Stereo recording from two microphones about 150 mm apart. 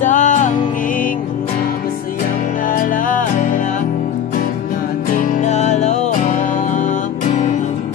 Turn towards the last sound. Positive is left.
turn(degrees=50)  # may be behind; listen again after turning